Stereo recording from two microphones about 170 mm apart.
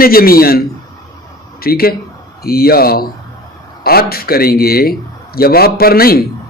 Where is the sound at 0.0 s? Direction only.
60° left (ahead or behind).